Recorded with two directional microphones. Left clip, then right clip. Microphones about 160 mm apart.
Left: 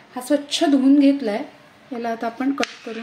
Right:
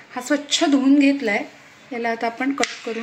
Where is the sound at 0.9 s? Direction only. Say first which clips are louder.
Even; 40° left (ahead or behind).